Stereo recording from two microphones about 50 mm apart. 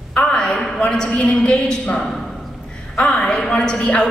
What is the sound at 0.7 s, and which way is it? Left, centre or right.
A man's voice, centre.